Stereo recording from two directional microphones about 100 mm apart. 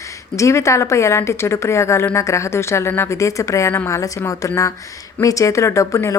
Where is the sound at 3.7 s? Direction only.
20° left (ahead or behind).